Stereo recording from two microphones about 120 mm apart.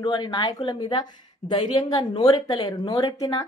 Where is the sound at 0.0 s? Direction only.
40° left (ahead or behind).